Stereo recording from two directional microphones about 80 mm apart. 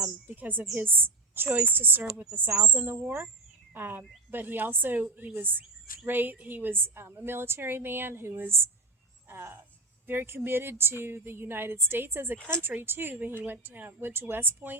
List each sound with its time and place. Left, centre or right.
0.3 s a woman's voice: right